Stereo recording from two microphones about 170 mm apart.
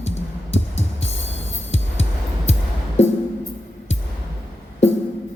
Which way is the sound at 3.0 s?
40° left (ahead or behind).